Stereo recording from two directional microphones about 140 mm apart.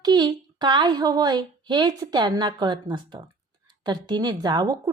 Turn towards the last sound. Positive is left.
turn(degrees=-30)  # may be behind; listen again after turning